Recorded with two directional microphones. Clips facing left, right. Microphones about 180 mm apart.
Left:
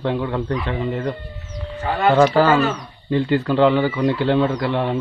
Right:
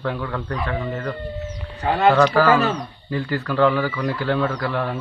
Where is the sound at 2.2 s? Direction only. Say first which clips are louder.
Left 2 dB; 25° left (ahead or behind).